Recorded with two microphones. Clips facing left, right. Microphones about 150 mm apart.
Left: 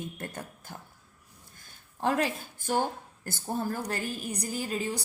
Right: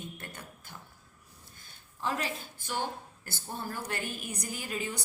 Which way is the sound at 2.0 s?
50° left (ahead or behind).